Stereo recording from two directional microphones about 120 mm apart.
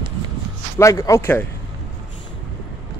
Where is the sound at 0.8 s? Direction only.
25° left (ahead or behind).